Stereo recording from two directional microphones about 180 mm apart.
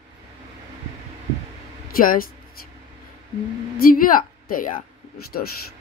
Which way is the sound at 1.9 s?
55° left (ahead or behind).